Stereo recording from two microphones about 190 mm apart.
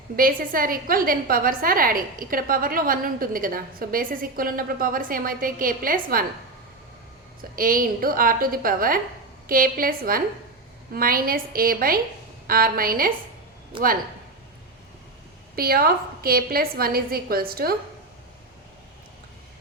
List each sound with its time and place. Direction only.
0.2 s a woman's voice: 50° right (ahead or behind)
7.5 s a woman's voice: 50° right (ahead or behind)
13.7 s speech: 25° right (ahead or behind)
15.5 s a woman's voice: 50° right (ahead or behind)